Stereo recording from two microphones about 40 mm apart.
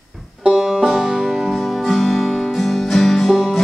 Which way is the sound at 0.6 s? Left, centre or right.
Centre.